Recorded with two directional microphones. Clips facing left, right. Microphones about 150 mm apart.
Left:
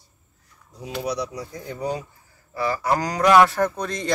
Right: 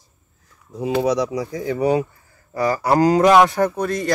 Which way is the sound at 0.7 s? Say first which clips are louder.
Right 9 dB; 90° right.